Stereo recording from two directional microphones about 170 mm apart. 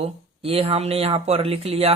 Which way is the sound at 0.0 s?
35° right (ahead or behind).